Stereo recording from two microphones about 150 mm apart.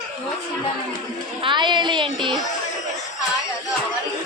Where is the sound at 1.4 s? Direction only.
30° right (ahead or behind).